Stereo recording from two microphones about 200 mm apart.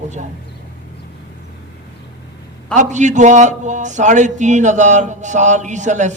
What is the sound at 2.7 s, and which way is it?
A man's voice, 35° right (ahead or behind).